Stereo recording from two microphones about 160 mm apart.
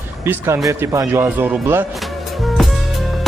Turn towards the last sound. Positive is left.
turn(degrees=0)  # may be behind; listen again after turning